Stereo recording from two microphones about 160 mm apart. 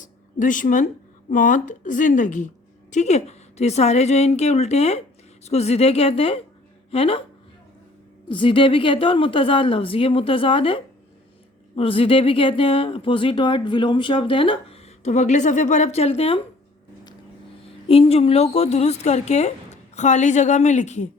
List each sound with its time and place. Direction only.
0.0 s a sound: 55° left (ahead or behind)
1.3 s a woman's voice: 55° left (ahead or behind); by 7.3 s 35° left (ahead or behind)
8.3 s speech: 30° left (ahead or behind)
17.8 s a woman's voice: 40° left (ahead or behind)